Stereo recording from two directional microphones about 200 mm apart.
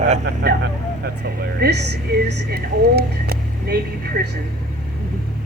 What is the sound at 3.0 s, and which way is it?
Vehicle, 55° right (ahead or behind).